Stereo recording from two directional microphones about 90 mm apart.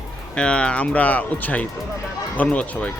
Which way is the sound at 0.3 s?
10° left (ahead or behind).